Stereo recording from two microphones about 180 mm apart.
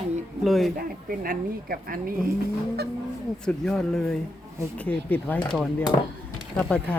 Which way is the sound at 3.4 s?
5° left (ahead or behind).